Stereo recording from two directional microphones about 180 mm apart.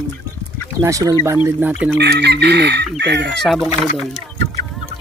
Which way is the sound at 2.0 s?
65° right (ahead or behind).